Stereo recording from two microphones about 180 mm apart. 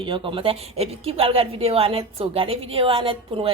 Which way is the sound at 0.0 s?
30° right (ahead or behind).